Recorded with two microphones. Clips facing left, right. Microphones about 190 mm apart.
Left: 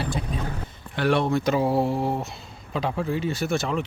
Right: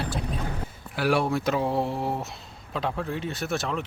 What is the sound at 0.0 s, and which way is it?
Boat, centre (ahead or behind).